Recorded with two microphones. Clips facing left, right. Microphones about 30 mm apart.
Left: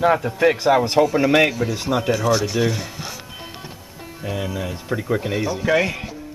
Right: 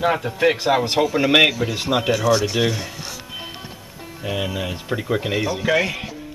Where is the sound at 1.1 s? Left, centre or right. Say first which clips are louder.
Right 1 dB; centre.